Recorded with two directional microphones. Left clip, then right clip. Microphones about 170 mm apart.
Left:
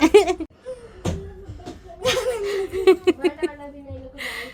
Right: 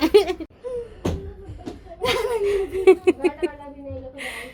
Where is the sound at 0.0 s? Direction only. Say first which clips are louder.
Left 2 dB; 25° left (ahead or behind).